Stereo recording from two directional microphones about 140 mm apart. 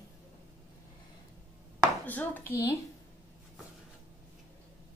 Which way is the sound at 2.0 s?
10° left (ahead or behind).